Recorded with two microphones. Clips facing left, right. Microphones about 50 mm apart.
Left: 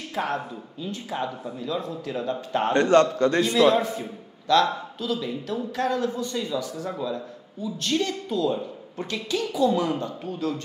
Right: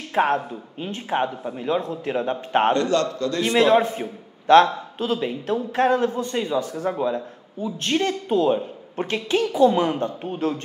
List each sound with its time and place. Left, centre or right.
0.1 s a man's voice: right
2.7 s a man's voice: left
3.4 s a man's voice: right